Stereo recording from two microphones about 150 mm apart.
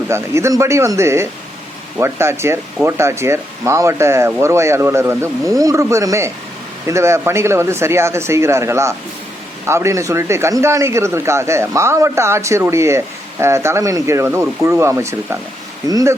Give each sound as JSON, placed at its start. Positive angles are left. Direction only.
{"t": 0.1, "sound": "a man's voice", "side_deg": -20}